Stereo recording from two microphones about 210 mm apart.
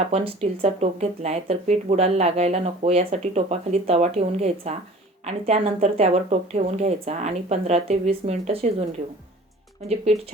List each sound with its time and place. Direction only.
0.6 s speech: 30° right (ahead or behind)
9.9 s speech: 30° right (ahead or behind)